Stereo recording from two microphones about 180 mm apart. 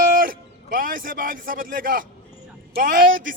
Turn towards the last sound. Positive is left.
turn(degrees=-50)  # may be behind; listen again after turning